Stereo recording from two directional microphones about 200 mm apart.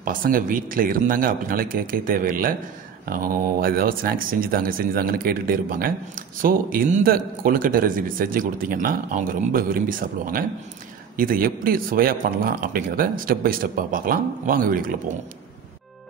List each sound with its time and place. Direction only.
0.0 s speech: 45° right (ahead or behind)